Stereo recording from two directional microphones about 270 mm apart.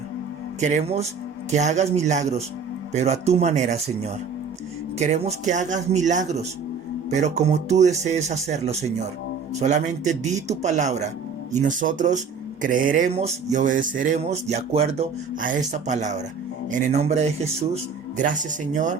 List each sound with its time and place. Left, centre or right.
0.6 s speech: right
4.9 s speech: right